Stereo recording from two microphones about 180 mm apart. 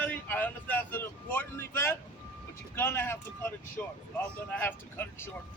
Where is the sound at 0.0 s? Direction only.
10° left (ahead or behind).